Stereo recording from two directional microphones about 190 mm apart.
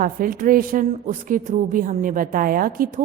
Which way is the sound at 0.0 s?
45° right (ahead or behind).